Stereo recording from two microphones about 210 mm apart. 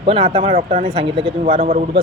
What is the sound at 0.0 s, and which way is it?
A man's voice, 25° right (ahead or behind).